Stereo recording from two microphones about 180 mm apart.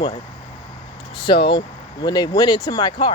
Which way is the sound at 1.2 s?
25° left (ahead or behind).